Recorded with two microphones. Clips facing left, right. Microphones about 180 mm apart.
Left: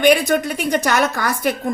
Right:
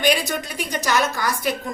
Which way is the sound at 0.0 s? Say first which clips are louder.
Left 7 dB; 60° left (ahead or behind).